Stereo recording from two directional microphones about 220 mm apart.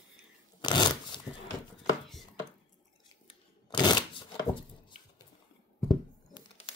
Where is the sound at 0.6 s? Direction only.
20° left (ahead or behind).